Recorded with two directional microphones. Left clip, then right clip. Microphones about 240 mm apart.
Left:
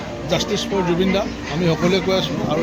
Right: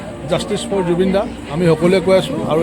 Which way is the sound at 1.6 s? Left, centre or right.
Right.